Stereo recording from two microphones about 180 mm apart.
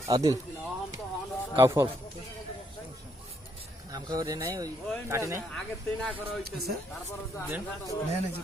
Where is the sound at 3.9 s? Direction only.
20° right (ahead or behind).